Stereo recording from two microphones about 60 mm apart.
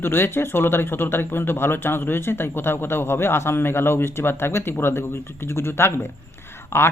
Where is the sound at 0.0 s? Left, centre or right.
Left.